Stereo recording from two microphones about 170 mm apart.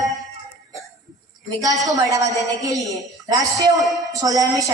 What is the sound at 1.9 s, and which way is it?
A woman's voice, 20° right (ahead or behind).